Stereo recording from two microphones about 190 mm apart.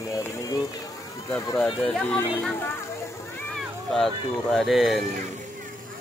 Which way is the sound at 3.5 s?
Centre (ahead or behind).